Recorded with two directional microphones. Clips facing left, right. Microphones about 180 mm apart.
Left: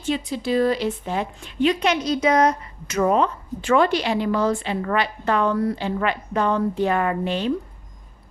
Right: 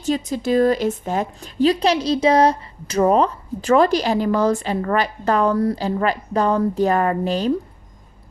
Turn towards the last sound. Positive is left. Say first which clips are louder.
# right 3 dB
turn(degrees=-40)  # may be behind; listen again after turning